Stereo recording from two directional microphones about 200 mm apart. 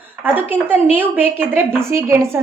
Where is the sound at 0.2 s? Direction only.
10° right (ahead or behind).